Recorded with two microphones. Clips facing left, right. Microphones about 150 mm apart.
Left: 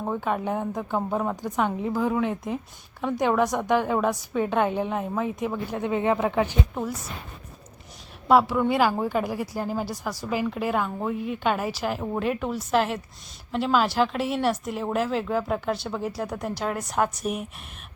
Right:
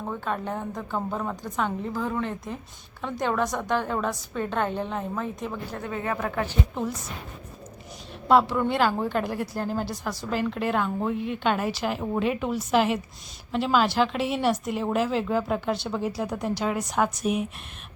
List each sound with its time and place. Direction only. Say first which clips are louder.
0.0 s a woman's voice: left 3 dB; 15° left (ahead or behind)
8.3 s speech: left 1 dB; 5° left (ahead or behind)